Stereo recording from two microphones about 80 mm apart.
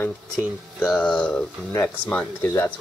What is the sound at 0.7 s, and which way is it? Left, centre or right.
Speech, centre.